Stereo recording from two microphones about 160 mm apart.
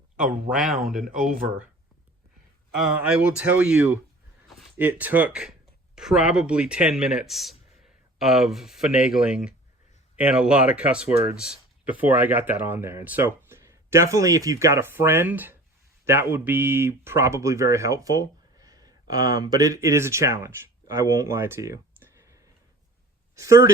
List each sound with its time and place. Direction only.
0.7 s speech: centre (ahead or behind)
2.7 s speech: 5° right (ahead or behind)